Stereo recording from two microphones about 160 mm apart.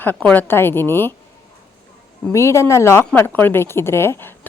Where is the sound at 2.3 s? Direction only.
15° left (ahead or behind).